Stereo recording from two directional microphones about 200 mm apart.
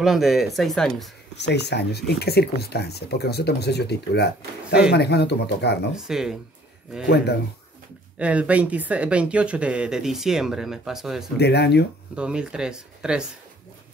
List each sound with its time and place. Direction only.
0.0 s speech: centre (ahead or behind)
1.3 s speech: 60° left (ahead or behind)
5.9 s speech: 5° right (ahead or behind)
8.2 s speech: 5° right (ahead or behind)
11.3 s speech: 55° left (ahead or behind)
12.2 s speech: 5° right (ahead or behind)